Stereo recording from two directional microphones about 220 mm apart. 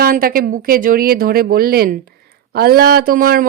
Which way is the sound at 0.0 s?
40° right (ahead or behind).